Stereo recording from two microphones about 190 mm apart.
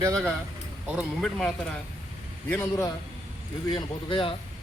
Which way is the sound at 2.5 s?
15° left (ahead or behind).